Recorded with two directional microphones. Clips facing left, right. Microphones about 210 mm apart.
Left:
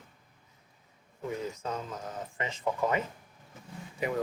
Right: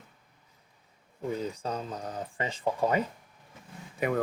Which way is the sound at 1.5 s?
35° right (ahead or behind).